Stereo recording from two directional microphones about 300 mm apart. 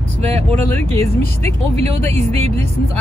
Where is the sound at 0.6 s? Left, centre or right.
Centre.